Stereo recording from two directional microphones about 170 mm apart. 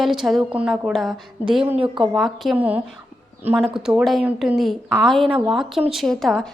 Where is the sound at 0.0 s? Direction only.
Centre (ahead or behind).